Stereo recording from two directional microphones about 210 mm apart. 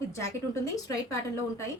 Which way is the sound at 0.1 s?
15° left (ahead or behind).